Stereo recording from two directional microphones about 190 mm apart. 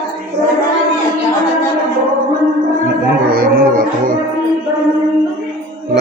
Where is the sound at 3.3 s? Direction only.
50° right (ahead or behind).